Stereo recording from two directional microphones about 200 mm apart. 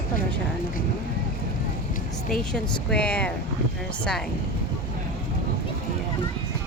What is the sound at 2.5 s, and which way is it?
Speech, 5° left (ahead or behind).